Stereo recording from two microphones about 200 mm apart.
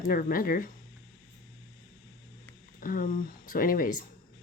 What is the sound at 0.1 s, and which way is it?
Speech, 45° left (ahead or behind).